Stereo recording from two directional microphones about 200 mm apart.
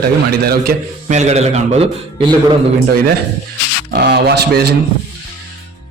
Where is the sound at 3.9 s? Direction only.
50° right (ahead or behind).